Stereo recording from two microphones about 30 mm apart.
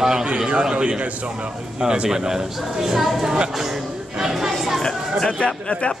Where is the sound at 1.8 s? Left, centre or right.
Right; by 3.3 s centre.